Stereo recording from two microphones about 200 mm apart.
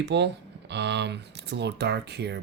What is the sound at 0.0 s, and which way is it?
Speech, 60° right (ahead or behind).